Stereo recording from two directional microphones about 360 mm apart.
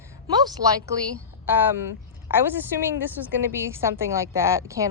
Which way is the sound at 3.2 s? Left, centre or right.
Centre.